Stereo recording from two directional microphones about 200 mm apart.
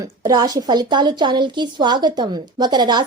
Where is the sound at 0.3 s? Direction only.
20° right (ahead or behind).